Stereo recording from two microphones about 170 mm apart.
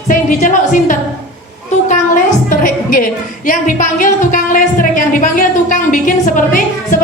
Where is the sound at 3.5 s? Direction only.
50° left (ahead or behind).